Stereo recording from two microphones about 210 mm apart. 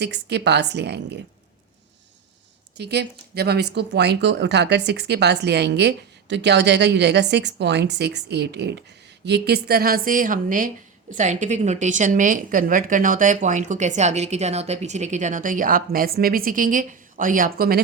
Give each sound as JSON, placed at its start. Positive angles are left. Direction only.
{"t": 0.0, "sound": "speech", "side_deg": -55}
{"t": 2.7, "sound": "a woman's voice", "side_deg": -50}